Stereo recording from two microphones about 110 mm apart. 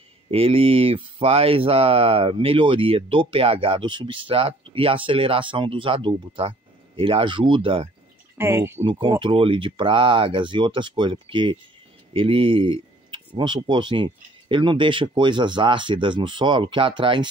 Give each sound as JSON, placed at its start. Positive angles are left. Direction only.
{"t": 0.3, "sound": "speech", "side_deg": -60}
{"t": 8.4, "sound": "speech", "side_deg": -20}
{"t": 9.2, "sound": "speech", "side_deg": -55}